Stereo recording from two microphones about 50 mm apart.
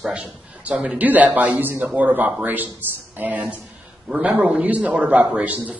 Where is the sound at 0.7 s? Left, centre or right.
Right.